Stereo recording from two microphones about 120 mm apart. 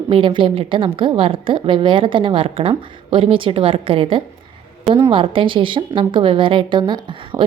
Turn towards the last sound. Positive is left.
turn(degrees=-40)  # may be behind; listen again after turning